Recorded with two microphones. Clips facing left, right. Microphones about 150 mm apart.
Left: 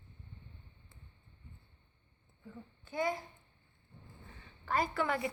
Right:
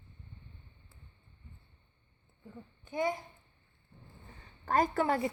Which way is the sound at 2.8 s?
20° right (ahead or behind).